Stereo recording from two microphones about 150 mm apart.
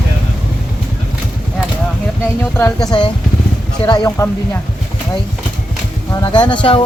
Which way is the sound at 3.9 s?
25° left (ahead or behind).